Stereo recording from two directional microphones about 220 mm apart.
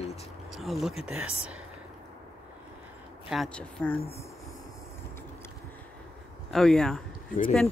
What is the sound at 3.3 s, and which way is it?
Speech, centre (ahead or behind).